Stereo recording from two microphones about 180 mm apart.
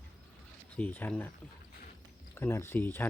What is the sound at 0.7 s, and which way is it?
Speech, 10° left (ahead or behind).